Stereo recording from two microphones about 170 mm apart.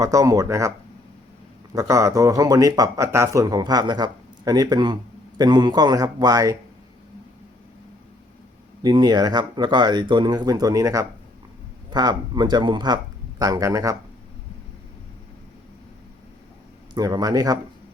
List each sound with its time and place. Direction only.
0.0 s speech: 20° right (ahead or behind)
1.7 s speech: 20° right (ahead or behind)
8.8 s speech: 25° right (ahead or behind)
16.9 s speech: 20° right (ahead or behind)